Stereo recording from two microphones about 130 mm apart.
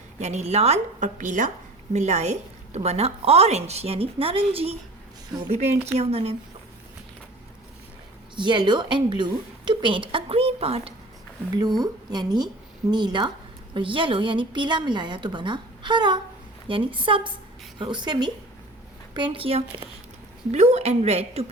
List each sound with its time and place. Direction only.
0.2 s a woman's voice: 60° right (ahead or behind); by 1.5 s 75° right (ahead or behind)
1.9 s a woman's voice: 60° right (ahead or behind)
8.4 s a woman's voice: 35° right (ahead or behind)
11.5 s a woman's voice: 30° right (ahead or behind)
20.5 s a woman's voice: 55° right (ahead or behind)